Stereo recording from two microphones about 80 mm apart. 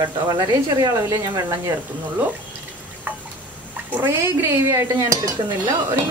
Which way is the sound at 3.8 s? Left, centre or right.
Right.